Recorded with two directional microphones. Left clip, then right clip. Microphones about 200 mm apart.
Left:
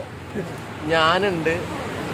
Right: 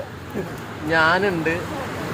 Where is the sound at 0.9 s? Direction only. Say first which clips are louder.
Right 1 dB; 10° left (ahead or behind).